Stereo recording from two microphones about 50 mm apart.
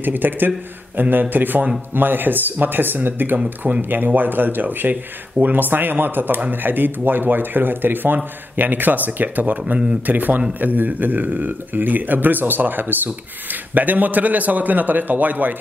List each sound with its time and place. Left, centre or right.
0.0 s a man's voice: right